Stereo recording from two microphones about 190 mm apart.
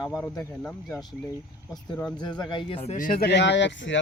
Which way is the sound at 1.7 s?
20° left (ahead or behind).